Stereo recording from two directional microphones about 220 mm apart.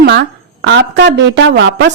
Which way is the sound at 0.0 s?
55° right (ahead or behind).